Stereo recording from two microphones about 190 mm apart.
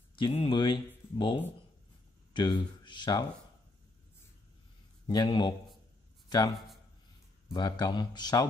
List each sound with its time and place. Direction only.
0.1 s speech: 30° left (ahead or behind)
5.0 s speech: 20° left (ahead or behind)
6.2 s a sound: 20° left (ahead or behind)
7.5 s speech: 20° left (ahead or behind)